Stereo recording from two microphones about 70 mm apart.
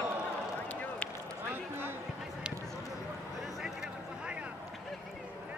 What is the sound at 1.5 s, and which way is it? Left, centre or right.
Basketball bounce, right.